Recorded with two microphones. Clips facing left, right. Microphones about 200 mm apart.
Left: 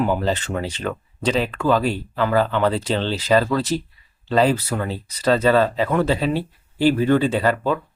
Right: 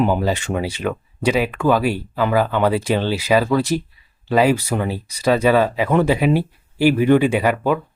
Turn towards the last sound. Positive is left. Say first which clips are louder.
# right 2 dB
turn(degrees=-15)  # may be behind; listen again after turning